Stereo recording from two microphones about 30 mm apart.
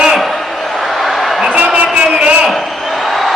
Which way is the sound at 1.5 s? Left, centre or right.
Right.